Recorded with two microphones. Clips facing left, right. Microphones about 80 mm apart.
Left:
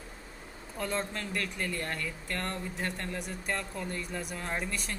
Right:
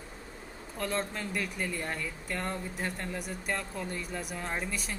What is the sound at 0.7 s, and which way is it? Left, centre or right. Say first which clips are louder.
Speech: even; centre.